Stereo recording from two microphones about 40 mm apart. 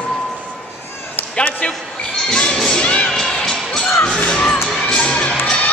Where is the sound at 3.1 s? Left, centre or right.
Centre.